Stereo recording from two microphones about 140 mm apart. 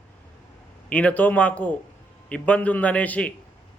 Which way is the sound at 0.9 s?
10° left (ahead or behind).